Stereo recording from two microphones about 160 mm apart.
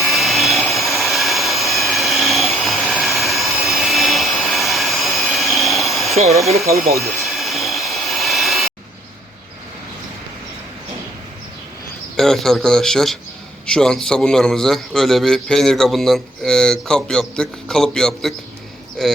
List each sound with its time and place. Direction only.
0.0 s vacuum cleaner: centre (ahead or behind)
6.1 s speech: 40° right (ahead or behind)
6.9 s a sound: centre (ahead or behind)
12.1 s a man's voice: 5° left (ahead or behind)